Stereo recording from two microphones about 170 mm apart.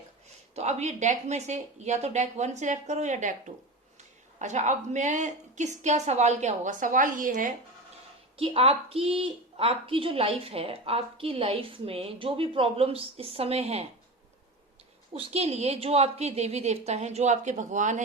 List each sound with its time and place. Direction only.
0.5 s a woman's voice: 40° right (ahead or behind)
8.4 s a woman's voice: 35° right (ahead or behind)
15.1 s a woman's voice: 35° right (ahead or behind)